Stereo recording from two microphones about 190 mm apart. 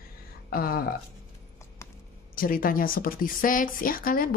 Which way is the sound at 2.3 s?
50° left (ahead or behind).